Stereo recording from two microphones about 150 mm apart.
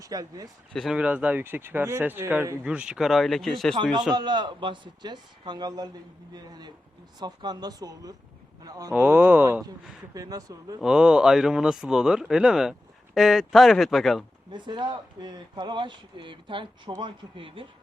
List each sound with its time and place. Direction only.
0.0 s a man's voice: 25° right (ahead or behind)
0.7 s speech: centre (ahead or behind)
0.9 s a man's voice: 10° right (ahead or behind)
4.1 s a man's voice: 30° right (ahead or behind)
8.9 s a man's voice: 15° right (ahead or behind)
10.8 s speech: 5° right (ahead or behind)
14.5 s speech: 30° right (ahead or behind)